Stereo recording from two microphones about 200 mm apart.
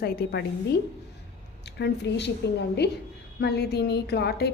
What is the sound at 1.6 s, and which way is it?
A woman's voice, 60° left (ahead or behind).